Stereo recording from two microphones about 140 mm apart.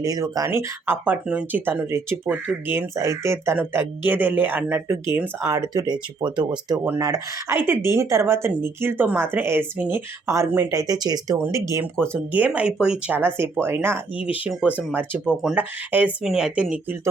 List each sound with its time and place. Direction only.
0.0 s speech: 25° right (ahead or behind)
5.5 s speech: 30° right (ahead or behind)
6.8 s speech: 20° right (ahead or behind)